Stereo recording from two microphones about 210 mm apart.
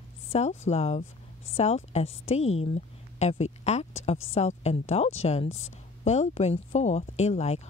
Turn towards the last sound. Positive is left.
turn(degrees=30)  # may be behind; listen again after turning